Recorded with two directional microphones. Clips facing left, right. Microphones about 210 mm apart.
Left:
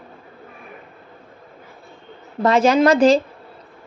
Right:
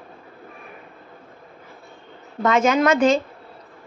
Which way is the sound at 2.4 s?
35° left (ahead or behind).